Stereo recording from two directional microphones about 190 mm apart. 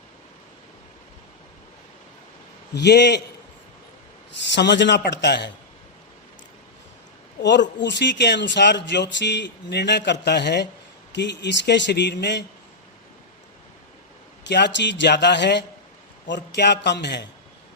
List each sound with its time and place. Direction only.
2.7 s a man's voice: 60° left (ahead or behind)
4.5 s a man's voice: 65° left (ahead or behind)
7.4 s a man's voice: 65° left (ahead or behind)
14.4 s a man's voice: 65° left (ahead or behind)